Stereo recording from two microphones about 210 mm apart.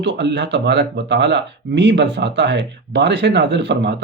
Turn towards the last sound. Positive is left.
turn(degrees=-55)  # may be behind; listen again after turning